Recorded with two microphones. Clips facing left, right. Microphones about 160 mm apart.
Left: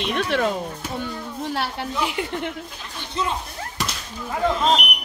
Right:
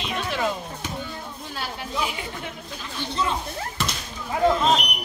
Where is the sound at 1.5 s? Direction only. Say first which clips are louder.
Left 4 dB; 70° left (ahead or behind).